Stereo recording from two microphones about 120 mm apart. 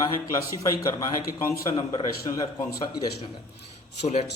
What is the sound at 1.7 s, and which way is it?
Speech, 45° left (ahead or behind).